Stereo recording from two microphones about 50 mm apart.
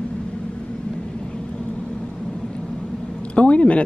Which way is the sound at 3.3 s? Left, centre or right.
Left.